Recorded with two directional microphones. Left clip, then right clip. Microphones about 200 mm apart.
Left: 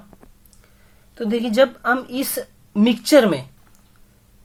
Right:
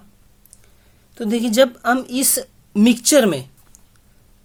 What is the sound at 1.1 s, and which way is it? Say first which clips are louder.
Speech: right 2 dB; 40° right (ahead or behind).